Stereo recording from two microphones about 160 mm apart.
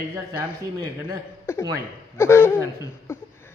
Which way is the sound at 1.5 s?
15° left (ahead or behind).